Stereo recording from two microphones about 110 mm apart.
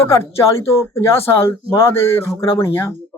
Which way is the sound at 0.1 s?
25° left (ahead or behind).